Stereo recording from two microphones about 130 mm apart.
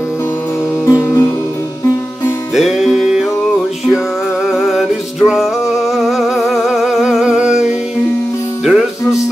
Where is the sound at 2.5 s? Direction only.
Centre (ahead or behind).